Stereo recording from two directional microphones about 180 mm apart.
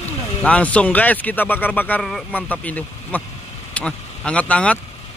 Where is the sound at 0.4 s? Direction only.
10° left (ahead or behind).